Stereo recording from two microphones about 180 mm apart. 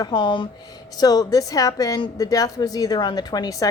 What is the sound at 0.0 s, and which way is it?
A woman's voice, 25° left (ahead or behind).